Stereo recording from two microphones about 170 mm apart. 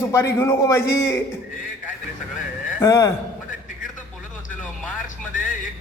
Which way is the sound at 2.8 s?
20° left (ahead or behind).